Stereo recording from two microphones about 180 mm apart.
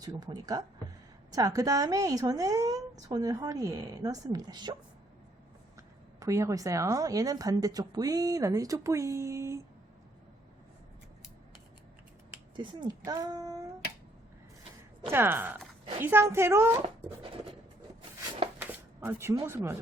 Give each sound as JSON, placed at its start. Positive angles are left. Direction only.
{"t": 0.0, "sound": "a woman's voice", "side_deg": -20}
{"t": 5.7, "sound": "a woman's voice", "side_deg": -15}
{"t": 12.5, "sound": "a woman's voice", "side_deg": -25}
{"t": 15.1, "sound": "speech", "side_deg": -10}
{"t": 18.6, "sound": "speech", "side_deg": -10}